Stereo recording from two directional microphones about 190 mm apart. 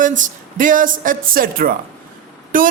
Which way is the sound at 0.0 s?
45° right (ahead or behind).